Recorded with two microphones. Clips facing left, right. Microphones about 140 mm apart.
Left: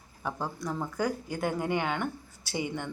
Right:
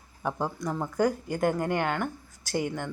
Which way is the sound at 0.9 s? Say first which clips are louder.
Right 8 dB; centre (ahead or behind).